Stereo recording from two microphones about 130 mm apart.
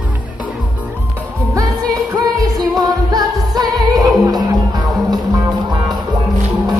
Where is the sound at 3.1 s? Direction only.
30° right (ahead or behind).